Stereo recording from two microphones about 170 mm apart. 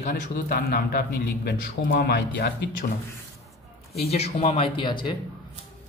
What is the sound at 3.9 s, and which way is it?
Speech, 35° left (ahead or behind).